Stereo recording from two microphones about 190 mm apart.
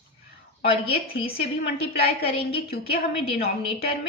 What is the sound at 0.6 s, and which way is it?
A woman's voice, 30° left (ahead or behind).